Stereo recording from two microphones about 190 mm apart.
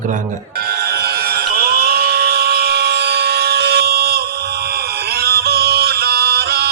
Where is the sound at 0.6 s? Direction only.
55° right (ahead or behind).